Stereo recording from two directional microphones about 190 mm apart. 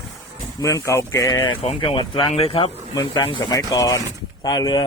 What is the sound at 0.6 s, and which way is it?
Speech, 15° left (ahead or behind).